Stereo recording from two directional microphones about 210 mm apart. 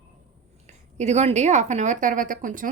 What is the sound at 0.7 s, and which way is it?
A woman's voice, 35° right (ahead or behind).